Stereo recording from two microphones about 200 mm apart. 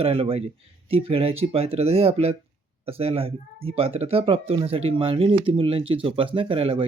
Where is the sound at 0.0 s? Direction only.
30° right (ahead or behind).